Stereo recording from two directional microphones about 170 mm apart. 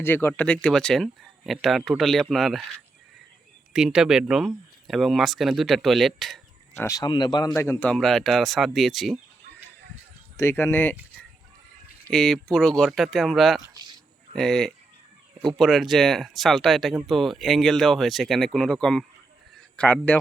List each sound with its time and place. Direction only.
0.0 s speech: 10° left (ahead or behind)
3.7 s speech: 5° right (ahead or behind)
6.7 s speech: 20° left (ahead or behind)
7.9 s speech: centre (ahead or behind)
10.3 s speech: 15° left (ahead or behind)
12.1 s speech: 5° left (ahead or behind)